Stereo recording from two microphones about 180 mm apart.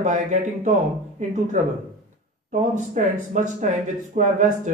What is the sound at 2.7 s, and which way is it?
Speech, 40° right (ahead or behind).